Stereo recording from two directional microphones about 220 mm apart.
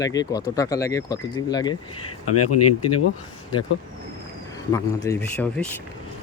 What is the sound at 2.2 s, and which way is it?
Speech, 90° left.